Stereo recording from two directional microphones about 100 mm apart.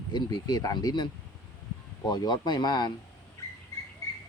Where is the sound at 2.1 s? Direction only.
45° left (ahead or behind).